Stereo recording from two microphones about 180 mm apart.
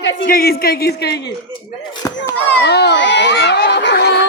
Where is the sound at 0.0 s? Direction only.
90° left.